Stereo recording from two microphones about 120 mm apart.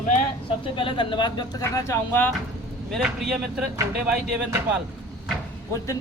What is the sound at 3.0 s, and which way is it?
Speech, 5° right (ahead or behind).